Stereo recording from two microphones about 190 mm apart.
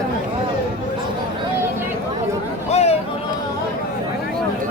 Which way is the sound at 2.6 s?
35° left (ahead or behind).